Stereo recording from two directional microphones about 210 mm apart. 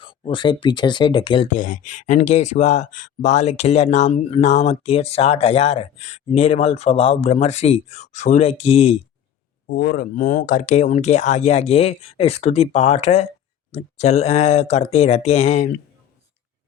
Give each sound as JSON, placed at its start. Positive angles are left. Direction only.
{"t": 0.0, "sound": "speech", "side_deg": 25}
{"t": 1.5, "sound": "speech", "side_deg": 40}
{"t": 9.6, "sound": "speech", "side_deg": 45}